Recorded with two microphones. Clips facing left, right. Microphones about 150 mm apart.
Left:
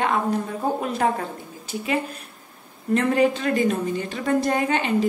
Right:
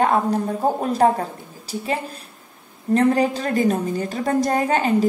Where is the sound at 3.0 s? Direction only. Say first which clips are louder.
Right 2 dB; 35° right (ahead or behind).